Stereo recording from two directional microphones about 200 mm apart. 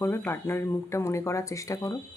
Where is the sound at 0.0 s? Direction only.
10° left (ahead or behind).